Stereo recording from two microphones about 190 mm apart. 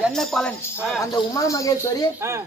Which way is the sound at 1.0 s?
15° left (ahead or behind).